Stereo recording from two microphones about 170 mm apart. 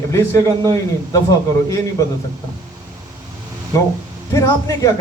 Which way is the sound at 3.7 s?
20° left (ahead or behind).